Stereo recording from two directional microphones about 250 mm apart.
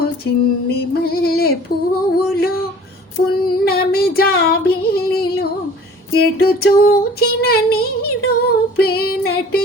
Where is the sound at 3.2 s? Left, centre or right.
Left.